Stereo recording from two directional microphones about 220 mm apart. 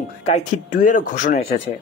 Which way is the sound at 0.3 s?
35° left (ahead or behind).